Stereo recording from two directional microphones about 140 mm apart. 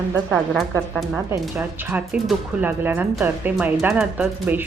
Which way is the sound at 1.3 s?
15° right (ahead or behind).